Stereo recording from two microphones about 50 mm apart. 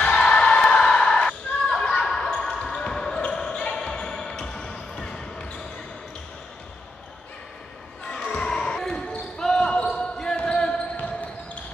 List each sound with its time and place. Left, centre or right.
0.0 s basketball bounce: left
8.1 s basketball bounce: centre